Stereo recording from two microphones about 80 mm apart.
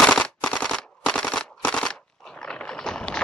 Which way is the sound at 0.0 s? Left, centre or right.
Centre.